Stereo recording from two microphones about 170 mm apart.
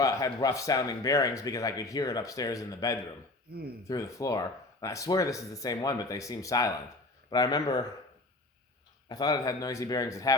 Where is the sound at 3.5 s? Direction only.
70° right (ahead or behind).